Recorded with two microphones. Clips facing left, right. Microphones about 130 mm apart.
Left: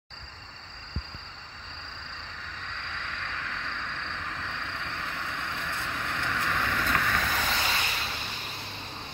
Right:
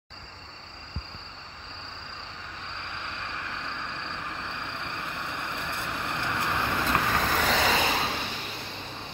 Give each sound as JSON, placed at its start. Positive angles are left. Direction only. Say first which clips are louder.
{"t": 2.9, "sound": "vehicle", "louder": "even", "side_deg": -20}
{"t": 7.4, "sound": "vehicle", "louder": "right 6 dB", "side_deg": -90}